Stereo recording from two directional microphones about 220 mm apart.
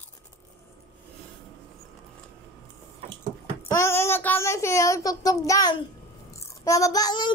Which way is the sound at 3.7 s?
10° left (ahead or behind).